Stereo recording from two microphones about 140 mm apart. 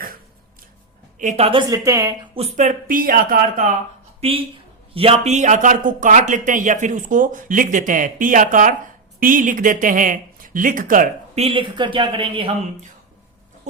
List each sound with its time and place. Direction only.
1.2 s speech: 60° right (ahead or behind)
1.7 s speech: 25° right (ahead or behind)
2.3 s speech: 50° right (ahead or behind); by 3.3 s 80° right
4.2 s speech: 40° right (ahead or behind); by 11.1 s 75° right (ahead or behind)
11.3 s speech: 40° right (ahead or behind)